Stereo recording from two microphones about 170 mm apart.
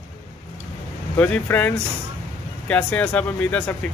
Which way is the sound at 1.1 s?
10° left (ahead or behind).